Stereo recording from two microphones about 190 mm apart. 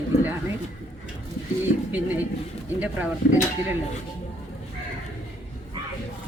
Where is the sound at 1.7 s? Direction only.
50° left (ahead or behind).